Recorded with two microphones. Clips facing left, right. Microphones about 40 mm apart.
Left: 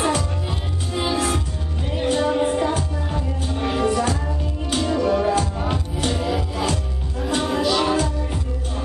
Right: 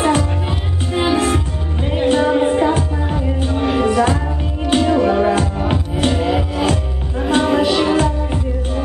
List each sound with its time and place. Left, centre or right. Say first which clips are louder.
0.1 s music: right 6 dB; right